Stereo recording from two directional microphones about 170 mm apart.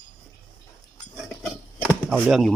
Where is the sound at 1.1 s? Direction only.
Centre (ahead or behind).